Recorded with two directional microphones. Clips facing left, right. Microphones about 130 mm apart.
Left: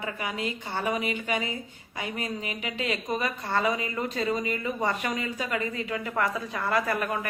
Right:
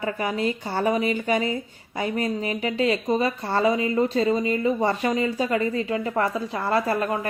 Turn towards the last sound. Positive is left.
turn(degrees=-30)  # may be behind; listen again after turning